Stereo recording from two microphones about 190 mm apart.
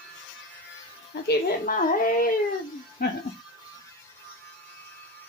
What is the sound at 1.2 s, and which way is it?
A woman's voice, 45° left (ahead or behind).